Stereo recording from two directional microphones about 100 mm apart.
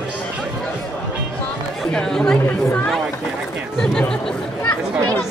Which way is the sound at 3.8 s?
5° left (ahead or behind).